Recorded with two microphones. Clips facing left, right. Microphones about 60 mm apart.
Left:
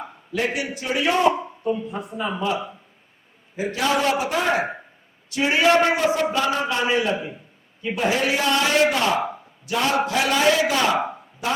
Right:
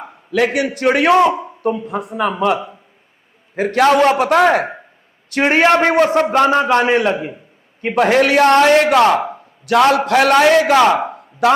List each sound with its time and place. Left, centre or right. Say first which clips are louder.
0.3 s a man's voice: right 9 dB; right
3.5 s a man's voice: right 10 dB; right
5.3 s a man's voice: right 5 dB; right
10.9 s a sound: right 4 dB; centre
11.4 s a man's voice: right 12 dB; right